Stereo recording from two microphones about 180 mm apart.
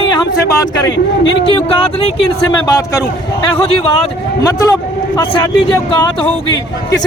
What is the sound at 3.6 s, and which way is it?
A man's voice, 30° left (ahead or behind).